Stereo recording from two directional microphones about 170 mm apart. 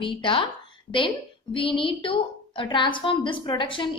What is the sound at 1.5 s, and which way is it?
A woman's voice, 30° left (ahead or behind).